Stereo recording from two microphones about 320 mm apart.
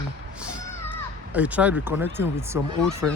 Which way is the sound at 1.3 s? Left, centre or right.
Centre.